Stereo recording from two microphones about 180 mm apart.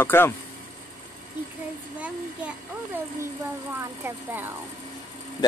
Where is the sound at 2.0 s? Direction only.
10° right (ahead or behind).